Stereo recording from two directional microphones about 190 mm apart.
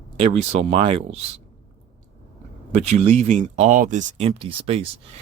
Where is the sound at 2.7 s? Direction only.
35° right (ahead or behind).